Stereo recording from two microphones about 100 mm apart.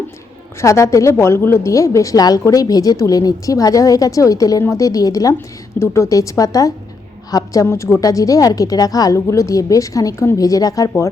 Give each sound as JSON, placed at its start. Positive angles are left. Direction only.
{"t": 0.6, "sound": "a woman's voice", "side_deg": 30}